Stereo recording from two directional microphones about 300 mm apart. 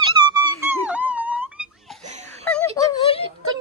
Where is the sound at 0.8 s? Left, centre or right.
Centre.